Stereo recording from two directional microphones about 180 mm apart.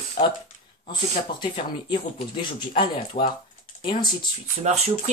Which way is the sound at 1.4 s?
25° left (ahead or behind).